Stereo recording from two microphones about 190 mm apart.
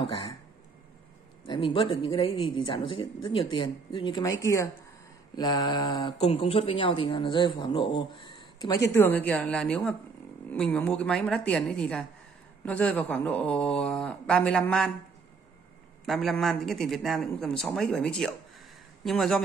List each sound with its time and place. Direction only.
1.5 s speech: 25° left (ahead or behind); by 14.9 s 5° left (ahead or behind)
16.1 s speech: centre (ahead or behind)